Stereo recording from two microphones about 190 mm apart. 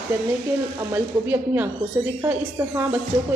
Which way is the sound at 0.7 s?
10° right (ahead or behind).